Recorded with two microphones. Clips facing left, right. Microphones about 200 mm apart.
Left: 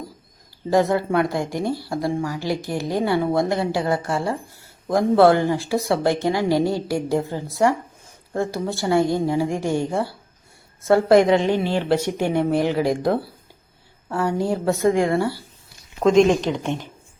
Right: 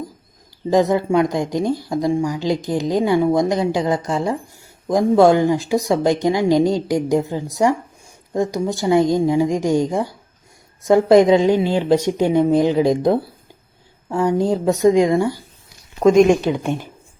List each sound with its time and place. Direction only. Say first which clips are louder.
0.7 s speech: right 3 dB; 20° right (ahead or behind)